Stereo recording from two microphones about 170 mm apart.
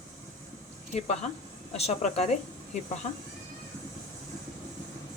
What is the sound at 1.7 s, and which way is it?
Speech, 35° left (ahead or behind).